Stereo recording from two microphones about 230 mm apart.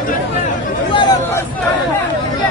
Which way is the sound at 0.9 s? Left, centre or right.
Centre.